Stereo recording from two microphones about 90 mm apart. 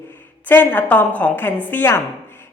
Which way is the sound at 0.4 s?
20° left (ahead or behind).